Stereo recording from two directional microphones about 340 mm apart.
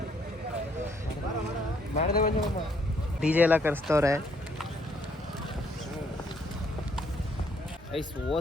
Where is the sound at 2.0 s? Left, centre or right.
Left.